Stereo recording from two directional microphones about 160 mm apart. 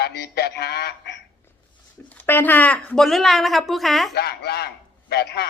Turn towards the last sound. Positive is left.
turn(degrees=85)